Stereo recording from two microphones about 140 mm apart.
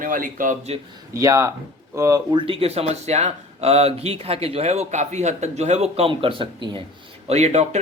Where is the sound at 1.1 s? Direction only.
20° right (ahead or behind).